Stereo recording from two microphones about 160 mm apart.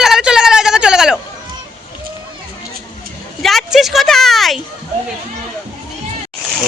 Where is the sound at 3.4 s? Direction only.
Centre (ahead or behind).